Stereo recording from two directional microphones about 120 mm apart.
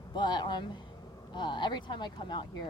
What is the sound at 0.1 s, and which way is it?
Speech, 35° left (ahead or behind).